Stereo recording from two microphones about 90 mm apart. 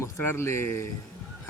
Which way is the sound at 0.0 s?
25° left (ahead or behind).